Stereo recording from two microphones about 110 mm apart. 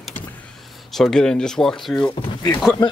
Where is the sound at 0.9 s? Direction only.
5° left (ahead or behind).